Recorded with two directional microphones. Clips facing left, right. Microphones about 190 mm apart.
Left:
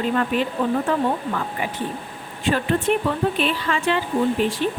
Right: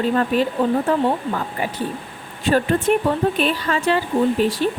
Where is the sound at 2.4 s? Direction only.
40° right (ahead or behind).